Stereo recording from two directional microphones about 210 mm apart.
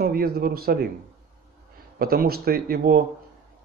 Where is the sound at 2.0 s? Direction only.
45° right (ahead or behind).